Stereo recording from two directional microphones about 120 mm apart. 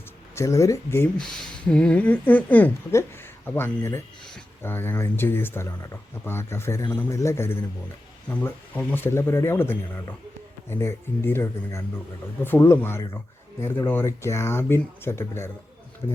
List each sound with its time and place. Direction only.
0.3 s speech: 25° left (ahead or behind)
1.2 s speech: 5° left (ahead or behind); by 15.4 s 20° left (ahead or behind)